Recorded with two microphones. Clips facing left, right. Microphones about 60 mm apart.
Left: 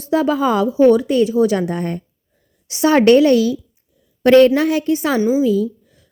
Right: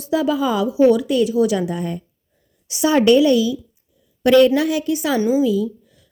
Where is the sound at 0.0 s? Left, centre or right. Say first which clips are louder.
Left 2 dB; left.